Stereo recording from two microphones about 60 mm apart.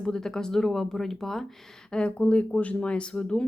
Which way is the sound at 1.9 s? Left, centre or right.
Centre.